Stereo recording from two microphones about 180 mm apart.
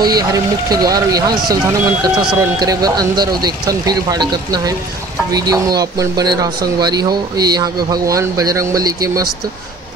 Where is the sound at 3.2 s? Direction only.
20° right (ahead or behind).